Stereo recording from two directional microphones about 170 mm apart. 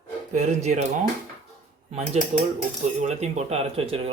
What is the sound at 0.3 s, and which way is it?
Speech, 40° right (ahead or behind).